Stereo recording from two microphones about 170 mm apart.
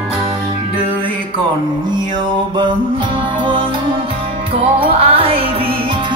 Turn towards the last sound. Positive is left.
turn(degrees=-35)  # may be behind; listen again after turning